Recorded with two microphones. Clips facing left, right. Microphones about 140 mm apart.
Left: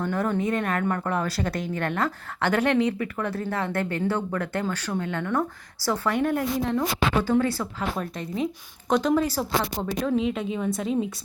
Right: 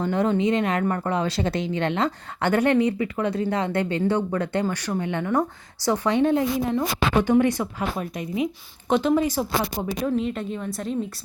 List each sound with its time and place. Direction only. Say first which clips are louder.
0.0 s speech: right 4 dB; 20° right (ahead or behind)
6.6 s speech: right 1 dB; 10° right (ahead or behind)